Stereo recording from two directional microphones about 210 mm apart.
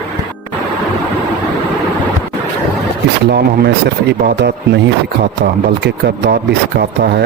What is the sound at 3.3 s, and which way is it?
Speech, 50° right (ahead or behind).